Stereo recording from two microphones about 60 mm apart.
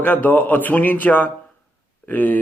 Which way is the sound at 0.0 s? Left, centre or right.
Left.